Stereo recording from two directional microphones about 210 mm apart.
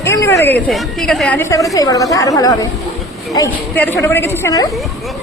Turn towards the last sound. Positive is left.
turn(degrees=15)  # may be behind; listen again after turning